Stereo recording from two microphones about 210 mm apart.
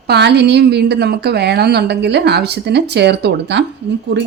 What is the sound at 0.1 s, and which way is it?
A woman's voice, 50° right (ahead or behind).